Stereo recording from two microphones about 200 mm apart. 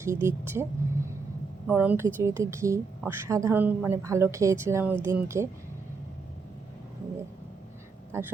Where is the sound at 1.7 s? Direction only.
10° right (ahead or behind).